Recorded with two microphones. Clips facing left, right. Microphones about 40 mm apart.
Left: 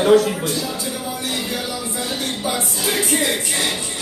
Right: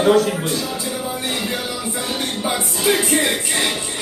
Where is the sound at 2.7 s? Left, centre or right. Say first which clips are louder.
Right 5 dB; centre.